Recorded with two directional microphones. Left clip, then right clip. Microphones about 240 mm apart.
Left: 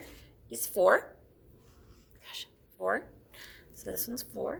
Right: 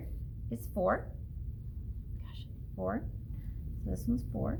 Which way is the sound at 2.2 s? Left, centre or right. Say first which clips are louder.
Left 15 dB; left.